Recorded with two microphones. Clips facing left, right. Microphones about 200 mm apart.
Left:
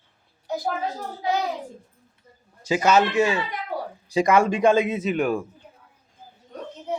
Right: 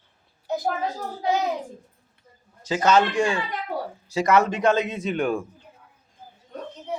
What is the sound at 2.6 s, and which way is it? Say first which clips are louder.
A man's voice: even; 10° left (ahead or behind).